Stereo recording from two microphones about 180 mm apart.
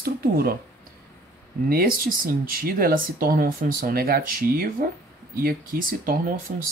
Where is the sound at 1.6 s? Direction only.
55° right (ahead or behind).